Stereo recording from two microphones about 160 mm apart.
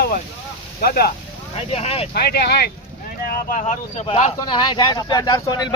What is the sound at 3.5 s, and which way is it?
Speech, 50° left (ahead or behind).